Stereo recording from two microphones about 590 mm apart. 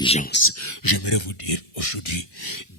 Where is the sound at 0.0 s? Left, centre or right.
Centre; by 2.2 s left.